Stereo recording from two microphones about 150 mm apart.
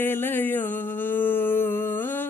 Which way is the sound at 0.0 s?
15° left (ahead or behind).